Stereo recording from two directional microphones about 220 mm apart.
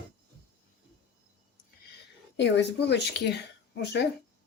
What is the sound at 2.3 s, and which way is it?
Speech, 50° left (ahead or behind).